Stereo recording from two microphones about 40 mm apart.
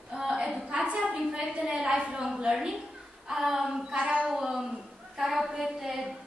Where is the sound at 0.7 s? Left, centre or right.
Right.